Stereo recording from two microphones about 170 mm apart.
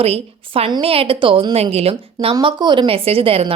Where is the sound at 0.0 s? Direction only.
35° right (ahead or behind).